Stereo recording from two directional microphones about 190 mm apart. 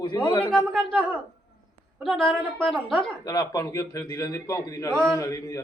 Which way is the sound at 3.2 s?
20° left (ahead or behind).